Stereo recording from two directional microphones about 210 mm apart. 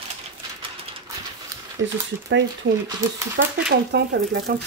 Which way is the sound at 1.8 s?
60° right (ahead or behind).